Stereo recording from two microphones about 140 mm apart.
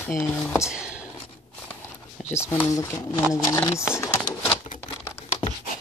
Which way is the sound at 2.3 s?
15° left (ahead or behind).